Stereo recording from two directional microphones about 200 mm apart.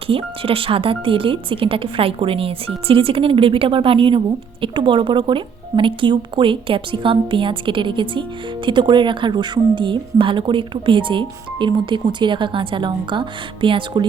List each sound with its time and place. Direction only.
0.1 s a woman's voice: 25° right (ahead or behind)